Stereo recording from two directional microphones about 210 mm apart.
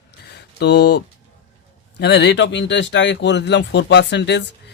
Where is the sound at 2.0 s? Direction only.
55° left (ahead or behind).